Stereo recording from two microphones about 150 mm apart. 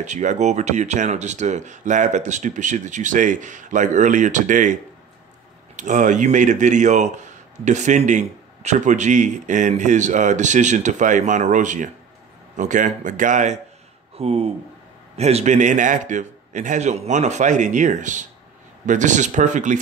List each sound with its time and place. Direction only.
0.0 s speech: 55° right (ahead or behind)
5.8 s speech: 55° right (ahead or behind)
14.1 s speech: 45° right (ahead or behind)